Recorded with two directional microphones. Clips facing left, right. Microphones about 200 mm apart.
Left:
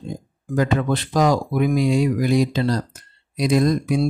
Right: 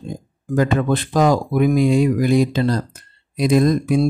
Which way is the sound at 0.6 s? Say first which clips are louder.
Right 2 dB; 50° right (ahead or behind).